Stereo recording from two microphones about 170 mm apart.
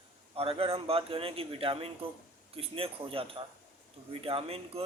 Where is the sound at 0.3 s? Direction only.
35° right (ahead or behind).